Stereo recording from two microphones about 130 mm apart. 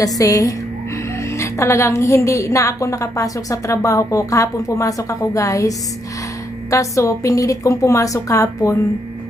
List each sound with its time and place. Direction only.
0.0 s a woman's voice: 25° left (ahead or behind)